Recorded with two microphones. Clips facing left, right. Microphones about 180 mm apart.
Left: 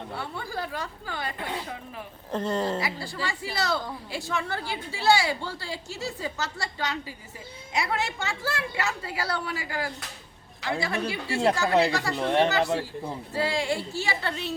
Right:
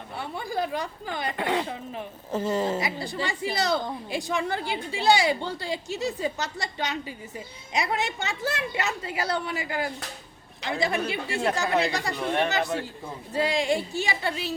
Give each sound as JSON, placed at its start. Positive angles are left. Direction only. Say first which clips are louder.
{"t": 0.2, "sound": "a woman's voice", "louder": "right 6 dB", "side_deg": -15}
{"t": 1.4, "sound": "speech", "louder": "right 7 dB", "side_deg": -80}
{"t": 1.6, "sound": "a woman's voice", "louder": "right 4 dB", "side_deg": -25}
{"t": 2.3, "sound": "a woman's voice", "louder": "right 1 dB", "side_deg": -5}
{"t": 2.8, "sound": "a woman's voice", "louder": "right 2 dB", "side_deg": -20}
{"t": 12.1, "sound": "speech", "louder": "left 4 dB", "side_deg": 25}
{"t": 12.5, "sound": "a woman's voice", "louder": "left 2 dB", "side_deg": -20}